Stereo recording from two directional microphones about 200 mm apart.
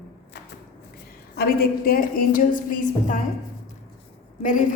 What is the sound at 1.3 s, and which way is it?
A woman's voice, 50° left (ahead or behind).